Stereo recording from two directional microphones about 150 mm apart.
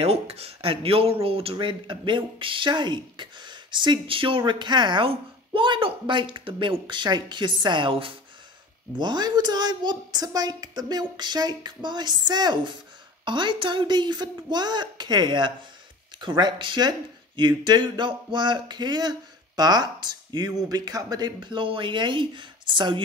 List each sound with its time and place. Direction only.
0.0 s a woman's voice: 40° right (ahead or behind)